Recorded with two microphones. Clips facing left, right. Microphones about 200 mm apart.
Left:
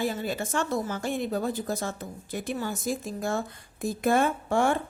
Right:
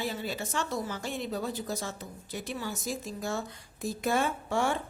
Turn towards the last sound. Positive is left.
turn(degrees=50)  # may be behind; listen again after turning